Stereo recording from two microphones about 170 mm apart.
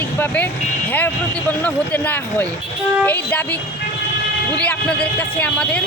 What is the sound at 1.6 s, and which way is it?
Speech, 10° left (ahead or behind).